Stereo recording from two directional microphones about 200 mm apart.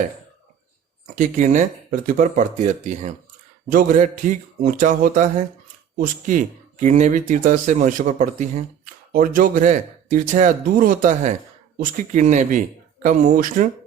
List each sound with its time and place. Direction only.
1.0 s speech: 40° right (ahead or behind)